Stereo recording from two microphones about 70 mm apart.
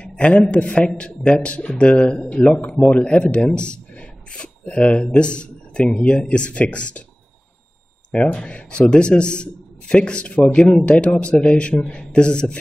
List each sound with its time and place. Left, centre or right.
0.0 s a man's voice: centre
8.1 s a man's voice: centre